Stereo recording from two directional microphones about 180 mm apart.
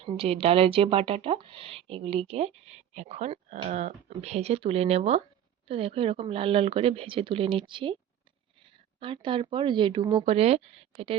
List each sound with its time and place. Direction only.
0.0 s speech: 30° right (ahead or behind)